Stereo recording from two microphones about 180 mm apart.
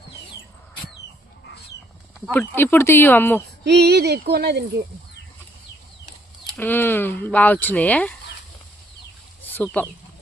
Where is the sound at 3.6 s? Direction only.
65° right (ahead or behind).